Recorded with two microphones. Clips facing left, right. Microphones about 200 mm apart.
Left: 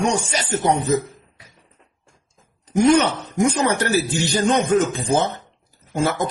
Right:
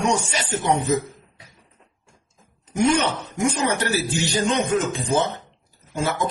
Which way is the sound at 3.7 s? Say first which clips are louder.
Left 3 dB; 45° left (ahead or behind).